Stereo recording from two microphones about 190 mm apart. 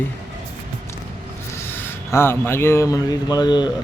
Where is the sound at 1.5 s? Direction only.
10° left (ahead or behind).